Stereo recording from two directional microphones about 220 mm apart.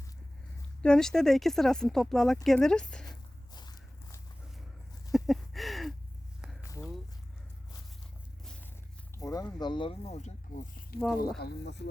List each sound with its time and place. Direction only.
0.8 s speech: 5° left (ahead or behind)
3.5 s walk: 20° left (ahead or behind)
5.1 s a sound: centre (ahead or behind)
9.1 s speech: 15° left (ahead or behind); by 11.0 s 35° left (ahead or behind)
11.3 s speech: 50° left (ahead or behind)